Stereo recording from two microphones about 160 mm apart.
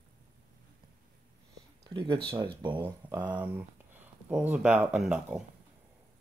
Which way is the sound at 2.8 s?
15° right (ahead or behind).